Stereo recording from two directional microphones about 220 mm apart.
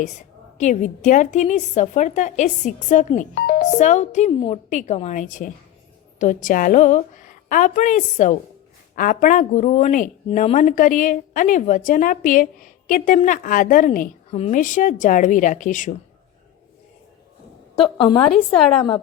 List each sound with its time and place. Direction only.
0.6 s a woman's voice: 35° left (ahead or behind)
3.8 s a woman's voice: 30° left (ahead or behind)
14.3 s a woman's voice: 25° left (ahead or behind)
17.9 s a woman's voice: 25° left (ahead or behind)